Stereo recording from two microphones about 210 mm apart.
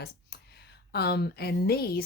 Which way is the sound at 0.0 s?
50° left (ahead or behind).